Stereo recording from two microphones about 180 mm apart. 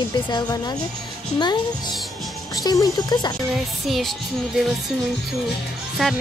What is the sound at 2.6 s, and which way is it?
Speech, 20° left (ahead or behind).